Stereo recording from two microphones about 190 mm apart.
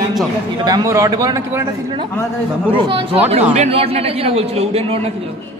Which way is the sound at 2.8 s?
25° right (ahead or behind).